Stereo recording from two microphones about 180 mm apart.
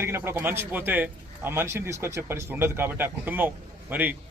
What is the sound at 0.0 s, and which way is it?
A man's voice, 15° right (ahead or behind).